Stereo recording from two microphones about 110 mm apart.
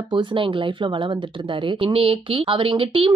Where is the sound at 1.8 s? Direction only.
60° right (ahead or behind).